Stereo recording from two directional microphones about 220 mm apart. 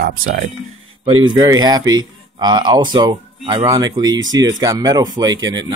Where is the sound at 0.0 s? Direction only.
35° right (ahead or behind).